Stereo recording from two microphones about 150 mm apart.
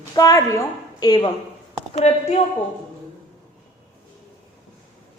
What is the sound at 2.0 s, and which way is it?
Speech, 45° left (ahead or behind).